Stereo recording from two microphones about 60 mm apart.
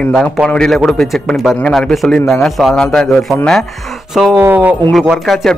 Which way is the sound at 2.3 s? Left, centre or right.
Centre.